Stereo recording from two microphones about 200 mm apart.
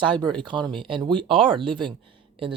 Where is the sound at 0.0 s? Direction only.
25° right (ahead or behind).